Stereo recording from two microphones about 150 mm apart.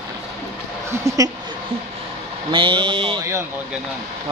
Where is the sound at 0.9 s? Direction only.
20° right (ahead or behind).